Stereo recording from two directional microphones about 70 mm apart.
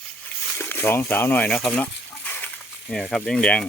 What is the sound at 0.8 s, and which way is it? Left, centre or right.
Speech, left.